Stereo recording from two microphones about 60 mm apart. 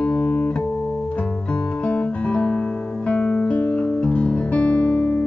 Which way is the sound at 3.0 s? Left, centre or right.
Centre.